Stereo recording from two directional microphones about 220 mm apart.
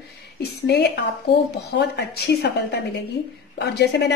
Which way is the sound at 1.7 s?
50° left (ahead or behind).